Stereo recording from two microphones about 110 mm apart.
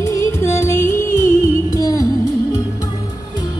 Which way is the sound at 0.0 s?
25° left (ahead or behind).